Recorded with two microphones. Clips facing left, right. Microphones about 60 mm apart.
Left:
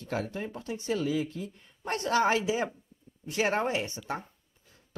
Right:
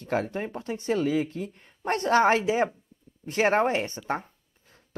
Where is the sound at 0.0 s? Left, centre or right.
Right.